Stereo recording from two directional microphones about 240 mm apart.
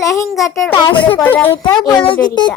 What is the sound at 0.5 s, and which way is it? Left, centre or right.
A child's voice, centre.